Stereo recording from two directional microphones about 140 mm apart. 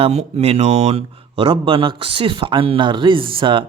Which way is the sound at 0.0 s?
50° right (ahead or behind).